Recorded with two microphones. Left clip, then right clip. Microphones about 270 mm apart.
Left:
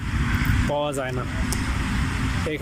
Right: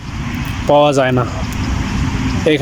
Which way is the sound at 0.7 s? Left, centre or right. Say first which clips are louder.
Right 18 dB; right.